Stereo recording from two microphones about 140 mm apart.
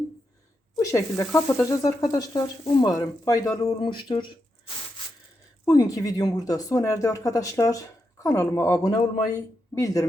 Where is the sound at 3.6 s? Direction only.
40° left (ahead or behind).